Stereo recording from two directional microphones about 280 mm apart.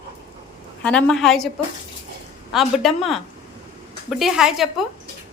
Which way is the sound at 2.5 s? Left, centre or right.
Centre.